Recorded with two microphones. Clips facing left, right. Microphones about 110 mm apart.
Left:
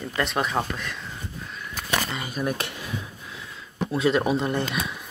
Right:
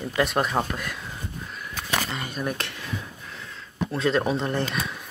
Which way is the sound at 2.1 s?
5° left (ahead or behind).